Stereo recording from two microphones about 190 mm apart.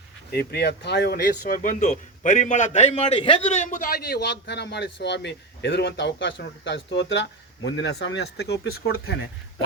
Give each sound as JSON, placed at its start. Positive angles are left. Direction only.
{"t": 0.3, "sound": "speech", "side_deg": 55}